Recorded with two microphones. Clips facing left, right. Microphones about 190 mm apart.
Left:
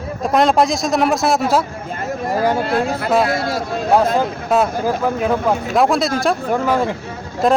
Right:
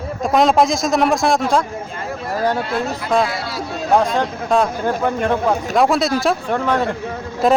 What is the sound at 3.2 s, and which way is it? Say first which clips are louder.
Speech: left 6 dB; 50° left (ahead or behind).